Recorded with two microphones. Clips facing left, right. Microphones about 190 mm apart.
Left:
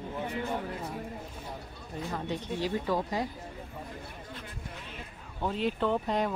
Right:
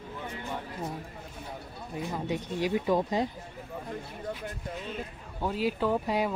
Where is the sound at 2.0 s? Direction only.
10° right (ahead or behind).